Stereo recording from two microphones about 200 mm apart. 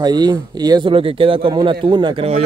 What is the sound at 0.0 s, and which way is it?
A man's voice, 20° right (ahead or behind).